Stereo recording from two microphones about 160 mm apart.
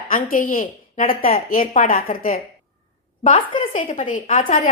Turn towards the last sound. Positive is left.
turn(degrees=50)  # may be behind; listen again after turning